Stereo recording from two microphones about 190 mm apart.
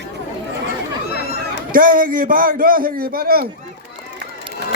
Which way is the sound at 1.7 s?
45° right (ahead or behind).